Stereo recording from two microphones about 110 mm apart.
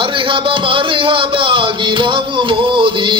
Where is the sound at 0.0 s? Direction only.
50° right (ahead or behind).